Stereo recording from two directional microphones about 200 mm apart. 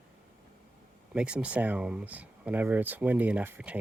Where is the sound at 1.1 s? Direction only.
5° right (ahead or behind).